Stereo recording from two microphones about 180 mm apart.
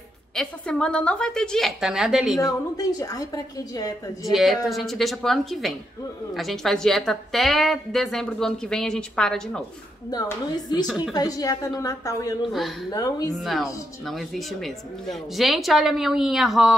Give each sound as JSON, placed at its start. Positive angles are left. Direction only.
{"t": 0.4, "sound": "a woman's voice", "side_deg": 5}
{"t": 2.4, "sound": "speech", "side_deg": 20}
{"t": 4.2, "sound": "a woman's voice", "side_deg": 0}
{"t": 10.1, "sound": "speech", "side_deg": 20}
{"t": 13.3, "sound": "a woman's voice", "side_deg": 0}